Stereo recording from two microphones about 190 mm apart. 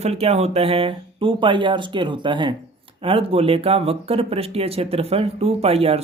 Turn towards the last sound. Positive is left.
turn(degrees=-30)  # may be behind; listen again after turning